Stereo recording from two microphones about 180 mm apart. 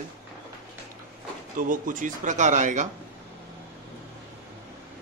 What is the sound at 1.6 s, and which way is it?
Speech, 50° right (ahead or behind).